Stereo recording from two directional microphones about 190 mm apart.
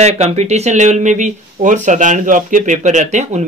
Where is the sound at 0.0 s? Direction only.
35° right (ahead or behind).